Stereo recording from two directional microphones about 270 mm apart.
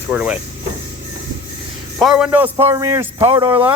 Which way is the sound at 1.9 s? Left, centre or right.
Centre.